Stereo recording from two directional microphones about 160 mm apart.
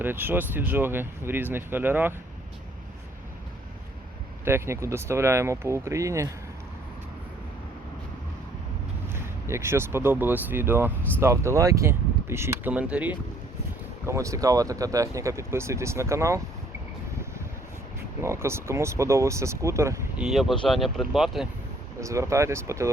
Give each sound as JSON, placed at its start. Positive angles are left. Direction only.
{"t": 0.0, "sound": "speech", "side_deg": -15}
{"t": 4.4, "sound": "speech", "side_deg": -15}
{"t": 9.1, "sound": "speech", "side_deg": -15}
{"t": 14.1, "sound": "speech", "side_deg": -20}
{"t": 18.2, "sound": "speech", "side_deg": -15}
{"t": 20.1, "sound": "speech", "side_deg": 0}
{"t": 22.0, "sound": "speech", "side_deg": -20}